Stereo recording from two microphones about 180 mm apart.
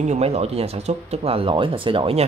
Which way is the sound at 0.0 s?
35° right (ahead or behind).